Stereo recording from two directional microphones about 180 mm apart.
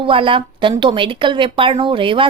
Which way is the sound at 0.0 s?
30° right (ahead or behind).